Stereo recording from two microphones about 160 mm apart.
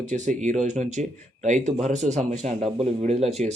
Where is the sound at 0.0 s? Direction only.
50° right (ahead or behind).